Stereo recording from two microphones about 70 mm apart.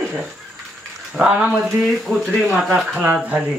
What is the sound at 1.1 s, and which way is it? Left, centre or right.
Speech, centre.